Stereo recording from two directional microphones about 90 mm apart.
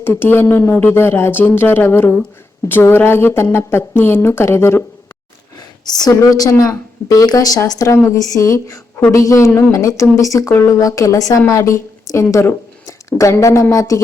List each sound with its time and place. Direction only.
0.0 s speech: 25° left (ahead or behind)
5.8 s a woman's voice: 45° left (ahead or behind)